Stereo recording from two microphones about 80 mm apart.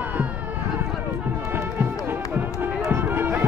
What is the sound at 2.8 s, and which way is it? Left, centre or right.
Music, right.